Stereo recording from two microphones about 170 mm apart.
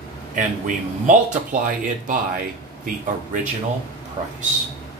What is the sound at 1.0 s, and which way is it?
Speech, 50° right (ahead or behind).